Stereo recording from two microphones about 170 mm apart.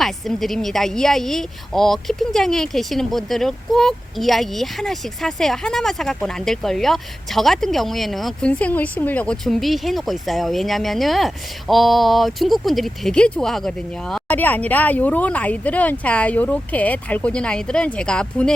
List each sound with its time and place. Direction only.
0.0 s speech: centre (ahead or behind)